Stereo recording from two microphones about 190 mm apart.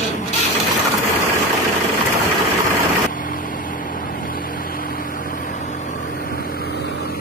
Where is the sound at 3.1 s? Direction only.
45° left (ahead or behind); by 7.2 s 60° left (ahead or behind).